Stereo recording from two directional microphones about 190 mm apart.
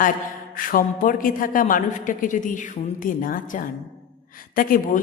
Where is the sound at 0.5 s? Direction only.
45° left (ahead or behind).